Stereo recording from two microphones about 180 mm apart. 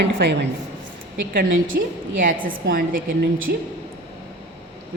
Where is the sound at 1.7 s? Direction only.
65° right (ahead or behind).